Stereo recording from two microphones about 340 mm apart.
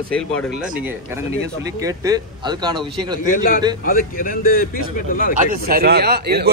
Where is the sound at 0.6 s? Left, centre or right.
Centre.